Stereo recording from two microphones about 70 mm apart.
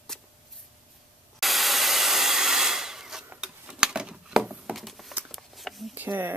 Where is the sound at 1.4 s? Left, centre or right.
Centre.